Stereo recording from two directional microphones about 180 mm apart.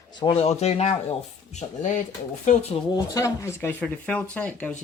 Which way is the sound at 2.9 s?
20° left (ahead or behind).